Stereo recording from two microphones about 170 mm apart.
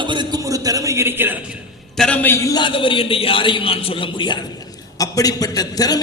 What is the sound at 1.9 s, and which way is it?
A man's voice, 5° left (ahead or behind).